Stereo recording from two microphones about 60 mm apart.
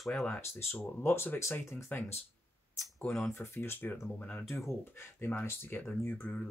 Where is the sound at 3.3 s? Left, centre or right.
Left.